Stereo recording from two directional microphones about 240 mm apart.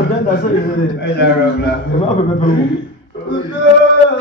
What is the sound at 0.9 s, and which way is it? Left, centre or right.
Speech, left.